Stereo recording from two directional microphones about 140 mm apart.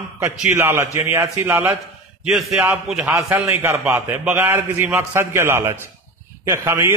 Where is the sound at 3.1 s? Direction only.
15° right (ahead or behind).